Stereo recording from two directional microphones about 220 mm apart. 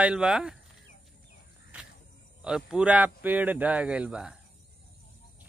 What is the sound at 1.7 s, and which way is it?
Cricket, 5° right (ahead or behind).